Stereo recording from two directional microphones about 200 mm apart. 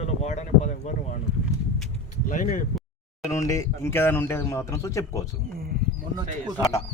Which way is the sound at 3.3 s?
15° left (ahead or behind).